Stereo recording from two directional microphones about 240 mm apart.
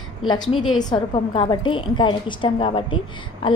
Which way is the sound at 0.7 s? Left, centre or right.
Centre.